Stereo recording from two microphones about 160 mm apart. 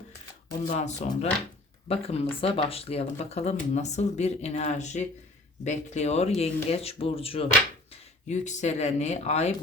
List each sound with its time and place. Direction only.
0.7 s speech: 45° left (ahead or behind)
8.3 s speech: 45° left (ahead or behind)